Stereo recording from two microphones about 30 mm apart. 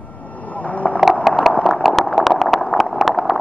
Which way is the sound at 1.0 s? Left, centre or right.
Centre.